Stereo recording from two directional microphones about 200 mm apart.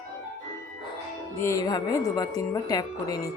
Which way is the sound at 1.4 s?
15° left (ahead or behind).